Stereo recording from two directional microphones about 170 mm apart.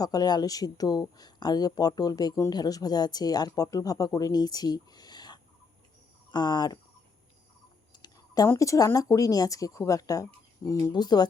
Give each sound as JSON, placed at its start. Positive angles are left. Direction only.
{"t": 0.0, "sound": "speech", "side_deg": 25}
{"t": 7.9, "sound": "speech", "side_deg": 25}